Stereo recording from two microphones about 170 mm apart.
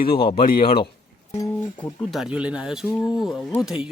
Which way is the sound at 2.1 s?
5° right (ahead or behind).